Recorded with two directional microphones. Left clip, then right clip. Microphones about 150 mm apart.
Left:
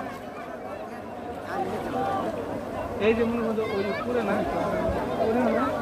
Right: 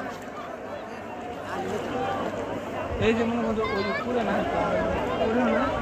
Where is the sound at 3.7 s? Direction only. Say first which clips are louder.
Right 1 dB; 40° right (ahead or behind).